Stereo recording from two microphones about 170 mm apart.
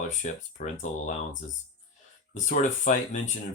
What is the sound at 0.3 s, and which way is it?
Speech, 45° left (ahead or behind).